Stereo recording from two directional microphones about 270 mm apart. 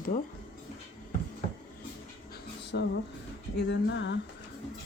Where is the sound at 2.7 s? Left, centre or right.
Left.